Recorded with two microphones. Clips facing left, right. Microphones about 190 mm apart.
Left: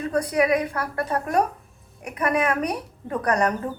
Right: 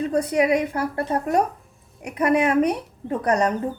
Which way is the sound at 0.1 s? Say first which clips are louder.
Even; 25° right (ahead or behind).